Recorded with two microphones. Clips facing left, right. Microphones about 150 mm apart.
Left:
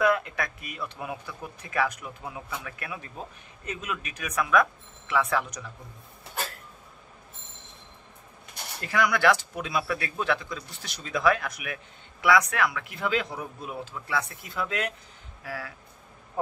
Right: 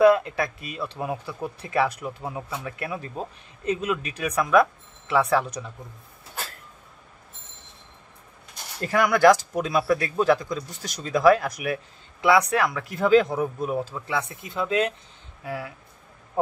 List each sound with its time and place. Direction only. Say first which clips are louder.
0.0 s speech: right 7 dB; 30° right (ahead or behind)
8.8 s speech: right 6 dB; 45° right (ahead or behind)
13.9 s speech: right 2 dB; 20° right (ahead or behind)